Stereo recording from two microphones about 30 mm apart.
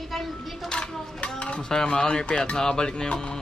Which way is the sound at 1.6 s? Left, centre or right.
Centre.